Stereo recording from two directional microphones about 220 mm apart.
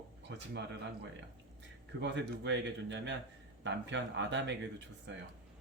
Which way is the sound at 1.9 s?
50° right (ahead or behind).